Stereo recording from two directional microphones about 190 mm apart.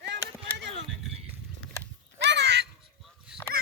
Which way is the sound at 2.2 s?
65° right (ahead or behind).